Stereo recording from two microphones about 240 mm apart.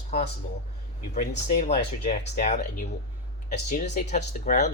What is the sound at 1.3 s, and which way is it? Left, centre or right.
Speech, left.